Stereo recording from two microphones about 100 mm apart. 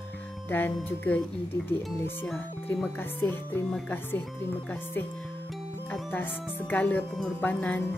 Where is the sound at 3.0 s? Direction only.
20° left (ahead or behind).